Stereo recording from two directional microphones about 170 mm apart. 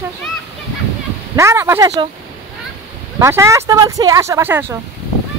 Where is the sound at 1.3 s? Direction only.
15° right (ahead or behind).